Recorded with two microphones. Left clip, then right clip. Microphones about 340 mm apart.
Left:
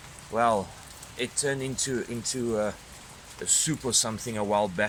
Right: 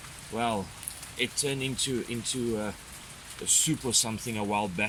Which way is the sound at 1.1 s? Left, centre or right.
Centre.